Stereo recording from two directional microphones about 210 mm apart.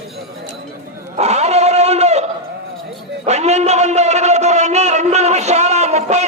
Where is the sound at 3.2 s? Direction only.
30° right (ahead or behind).